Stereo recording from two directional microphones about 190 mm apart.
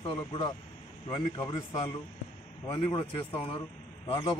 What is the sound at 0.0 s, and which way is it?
Speech, 25° left (ahead or behind).